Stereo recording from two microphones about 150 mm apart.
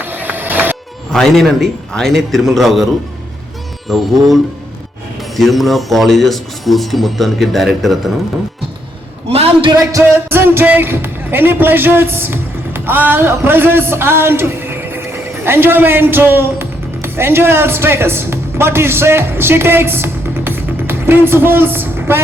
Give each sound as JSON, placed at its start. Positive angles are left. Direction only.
{"t": 0.0, "sound": "music", "side_deg": -15}
{"t": 1.1, "sound": "speech", "side_deg": 0}
{"t": 5.4, "sound": "speech", "side_deg": 0}
{"t": 9.3, "sound": "a man's voice", "side_deg": -40}
{"t": 9.7, "sound": "music", "side_deg": -20}